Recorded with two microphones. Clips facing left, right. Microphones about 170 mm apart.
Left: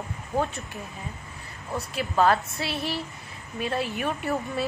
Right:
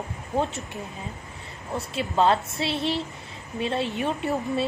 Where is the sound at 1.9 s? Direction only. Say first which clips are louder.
Even; 25° right (ahead or behind).